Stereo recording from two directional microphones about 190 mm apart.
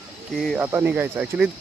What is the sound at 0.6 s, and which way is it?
Speech, 10° right (ahead or behind).